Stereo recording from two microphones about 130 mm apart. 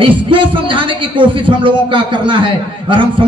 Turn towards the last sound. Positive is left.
turn(degrees=-40)  # may be behind; listen again after turning